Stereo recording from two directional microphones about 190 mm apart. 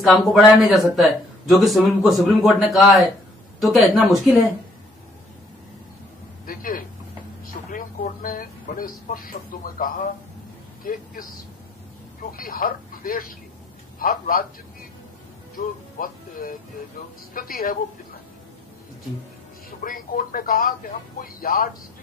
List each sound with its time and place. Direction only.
0.0 s speech: centre (ahead or behind)
6.4 s a sound: 50° left (ahead or behind)
7.7 s a man's voice: 45° left (ahead or behind)
15.5 s speech: 45° left (ahead or behind)
19.8 s speech: 45° left (ahead or behind)